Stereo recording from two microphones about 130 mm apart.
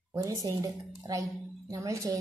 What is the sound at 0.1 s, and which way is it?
A woman's voice, 25° right (ahead or behind).